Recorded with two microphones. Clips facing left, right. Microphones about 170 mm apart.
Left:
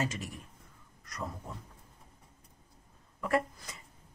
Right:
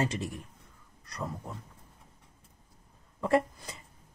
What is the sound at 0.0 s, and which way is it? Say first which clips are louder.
Speech: right 4 dB; 30° right (ahead or behind).